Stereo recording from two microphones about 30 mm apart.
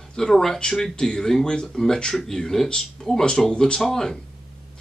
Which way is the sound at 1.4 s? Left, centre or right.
Left.